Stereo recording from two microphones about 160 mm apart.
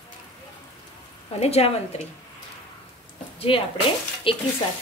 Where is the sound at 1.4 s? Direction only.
40° left (ahead or behind).